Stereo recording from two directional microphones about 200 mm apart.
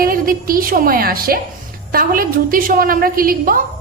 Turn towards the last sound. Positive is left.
turn(degrees=-45)  # may be behind; listen again after turning